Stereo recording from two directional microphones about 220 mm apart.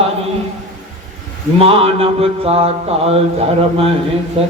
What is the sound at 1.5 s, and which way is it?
Mantra, 25° right (ahead or behind).